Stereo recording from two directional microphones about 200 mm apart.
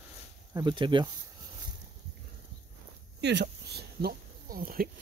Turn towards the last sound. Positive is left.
turn(degrees=-45)  # may be behind; listen again after turning